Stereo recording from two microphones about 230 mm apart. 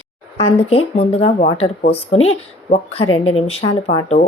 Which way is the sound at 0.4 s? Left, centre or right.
Left.